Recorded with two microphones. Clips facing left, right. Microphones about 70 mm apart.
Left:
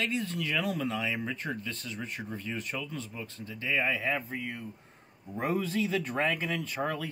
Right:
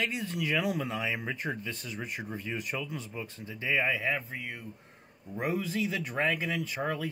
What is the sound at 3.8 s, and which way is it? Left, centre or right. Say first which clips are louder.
Speech: even; centre.